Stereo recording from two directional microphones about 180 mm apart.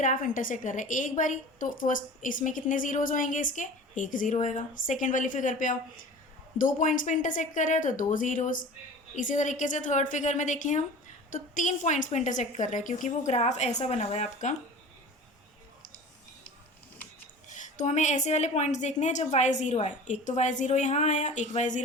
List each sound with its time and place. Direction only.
0.0 s a woman's voice: 45° left (ahead or behind)
17.5 s a woman's voice: 45° left (ahead or behind)